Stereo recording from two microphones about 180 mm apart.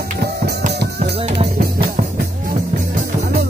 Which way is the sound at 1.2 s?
35° right (ahead or behind).